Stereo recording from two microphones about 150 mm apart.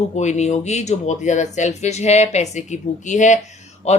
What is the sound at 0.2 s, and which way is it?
A woman's voice, 50° left (ahead or behind).